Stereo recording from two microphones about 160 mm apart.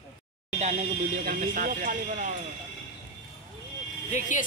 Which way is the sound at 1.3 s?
55° right (ahead or behind).